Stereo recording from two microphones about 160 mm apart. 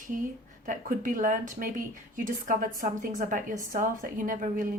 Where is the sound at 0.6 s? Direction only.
55° right (ahead or behind).